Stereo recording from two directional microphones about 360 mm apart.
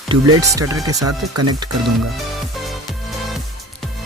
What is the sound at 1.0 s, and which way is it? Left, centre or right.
Speech, right.